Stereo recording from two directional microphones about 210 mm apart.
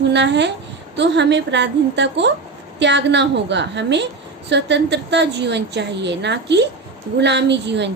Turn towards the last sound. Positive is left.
turn(degrees=-55)  # may be behind; listen again after turning